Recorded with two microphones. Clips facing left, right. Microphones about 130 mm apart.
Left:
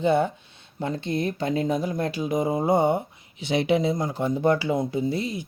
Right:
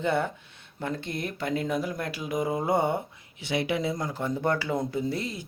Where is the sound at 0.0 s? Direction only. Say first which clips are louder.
Left 5 dB; 20° left (ahead or behind).